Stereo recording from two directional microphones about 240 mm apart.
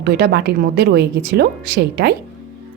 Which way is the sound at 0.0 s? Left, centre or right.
Right.